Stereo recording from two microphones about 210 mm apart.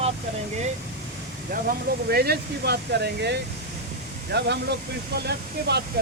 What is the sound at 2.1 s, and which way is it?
Speech, 50° right (ahead or behind).